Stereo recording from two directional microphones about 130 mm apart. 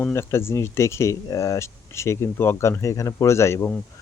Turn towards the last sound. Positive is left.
turn(degrees=20)  # may be behind; listen again after turning